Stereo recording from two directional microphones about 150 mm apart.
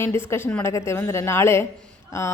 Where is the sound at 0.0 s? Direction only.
15° left (ahead or behind).